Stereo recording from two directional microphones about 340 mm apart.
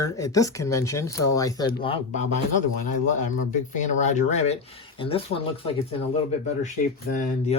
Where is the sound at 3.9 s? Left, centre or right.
Left.